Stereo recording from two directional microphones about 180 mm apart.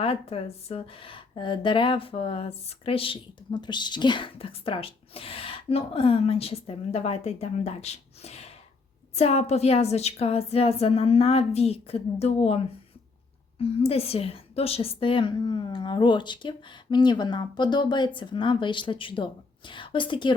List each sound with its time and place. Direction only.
0.0 s speech: 35° left (ahead or behind)
13.6 s a woman's voice: 35° left (ahead or behind)